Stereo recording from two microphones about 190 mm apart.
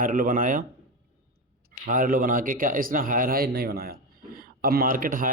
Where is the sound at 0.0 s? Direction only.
45° right (ahead or behind).